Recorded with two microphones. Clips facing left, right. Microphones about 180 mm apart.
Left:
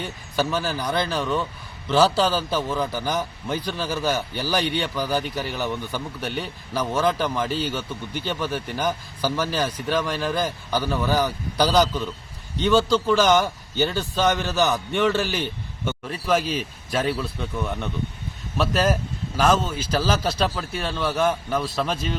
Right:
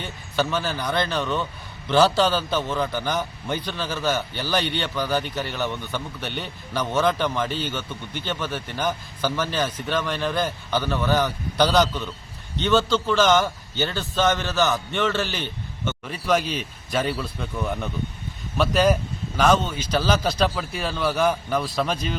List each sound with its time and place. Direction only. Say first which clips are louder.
0.0 s a man's voice: even; 10° left (ahead or behind)